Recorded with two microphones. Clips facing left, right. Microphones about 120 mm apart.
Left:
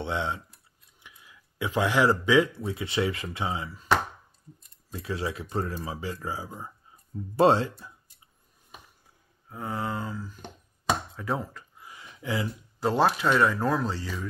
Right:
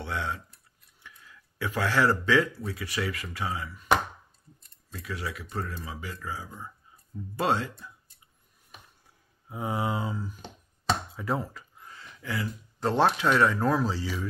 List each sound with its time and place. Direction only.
0.0 s speech: 20° left (ahead or behind)
4.9 s speech: 25° left (ahead or behind)
9.5 s speech: 15° right (ahead or behind)
11.1 s a sound: centre (ahead or behind)
11.9 s a sound: 15° left (ahead or behind)
12.8 s speech: centre (ahead or behind)